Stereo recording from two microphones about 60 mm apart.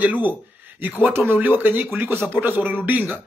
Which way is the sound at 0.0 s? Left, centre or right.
Right.